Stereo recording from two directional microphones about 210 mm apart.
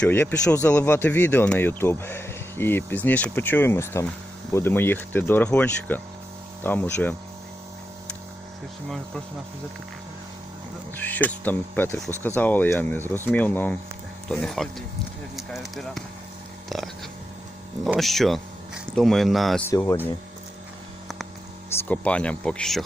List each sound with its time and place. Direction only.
0.0 s speech: 10° left (ahead or behind)
10.9 s a sound: 10° left (ahead or behind)
11.4 s speech: 10° left (ahead or behind)
16.6 s a sound: centre (ahead or behind)
17.8 s speech: centre (ahead or behind)
19.7 s speech: 15° left (ahead or behind)
21.8 s speech: 5° left (ahead or behind)